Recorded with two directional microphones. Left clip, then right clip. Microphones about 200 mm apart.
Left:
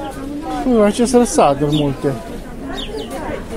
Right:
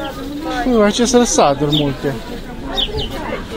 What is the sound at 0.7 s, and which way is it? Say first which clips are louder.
Speech: even; 15° left (ahead or behind).